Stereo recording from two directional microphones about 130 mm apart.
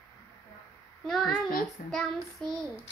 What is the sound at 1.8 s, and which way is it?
Child singing, 90° left.